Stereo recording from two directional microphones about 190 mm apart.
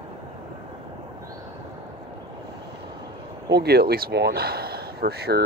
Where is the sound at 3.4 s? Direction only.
60° right (ahead or behind).